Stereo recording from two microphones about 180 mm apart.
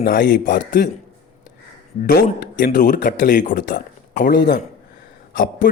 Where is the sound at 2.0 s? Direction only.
55° left (ahead or behind).